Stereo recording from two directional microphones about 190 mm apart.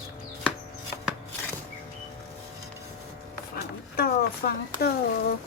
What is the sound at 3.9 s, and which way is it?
Speech, 55° left (ahead or behind).